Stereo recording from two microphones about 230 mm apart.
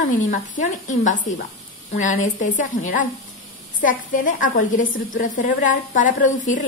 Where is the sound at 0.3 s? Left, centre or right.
Left.